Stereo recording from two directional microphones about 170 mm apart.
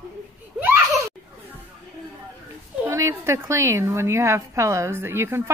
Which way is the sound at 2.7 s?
15° right (ahead or behind).